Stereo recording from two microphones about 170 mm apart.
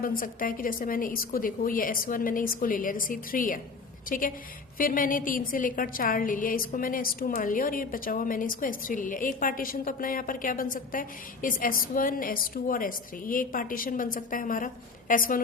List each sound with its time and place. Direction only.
0.0 s a woman's voice: 55° left (ahead or behind)
4.8 s a woman's voice: 55° left (ahead or behind)